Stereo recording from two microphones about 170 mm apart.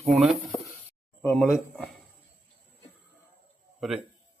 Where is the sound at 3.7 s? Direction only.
Centre (ahead or behind).